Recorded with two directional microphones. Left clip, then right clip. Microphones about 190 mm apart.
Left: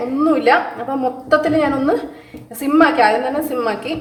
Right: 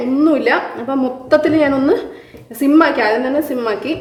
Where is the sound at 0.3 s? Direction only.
25° right (ahead or behind).